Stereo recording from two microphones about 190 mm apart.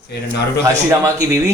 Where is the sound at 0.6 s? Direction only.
15° right (ahead or behind).